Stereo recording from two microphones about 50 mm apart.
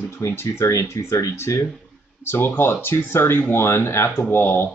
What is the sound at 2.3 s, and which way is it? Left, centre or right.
Speech, left.